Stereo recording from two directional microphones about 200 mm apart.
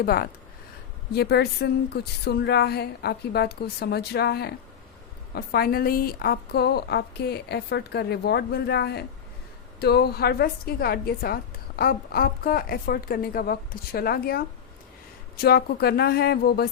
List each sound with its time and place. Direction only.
0.0 s a woman's voice: 50° left (ahead or behind)